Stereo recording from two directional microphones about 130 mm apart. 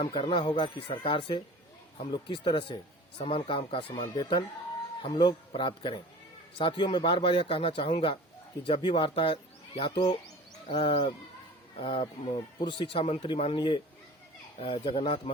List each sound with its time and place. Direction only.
0.0 s speech: 40° left (ahead or behind)